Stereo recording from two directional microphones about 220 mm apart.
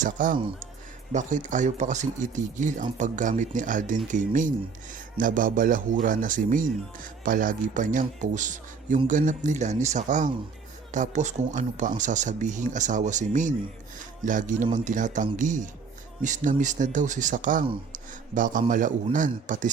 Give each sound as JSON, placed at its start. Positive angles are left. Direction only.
{"t": 0.0, "sound": "speech", "side_deg": -35}